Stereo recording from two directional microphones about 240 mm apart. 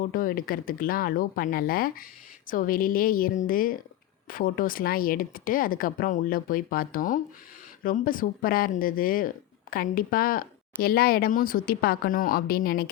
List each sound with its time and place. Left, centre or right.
0.0 s speech: left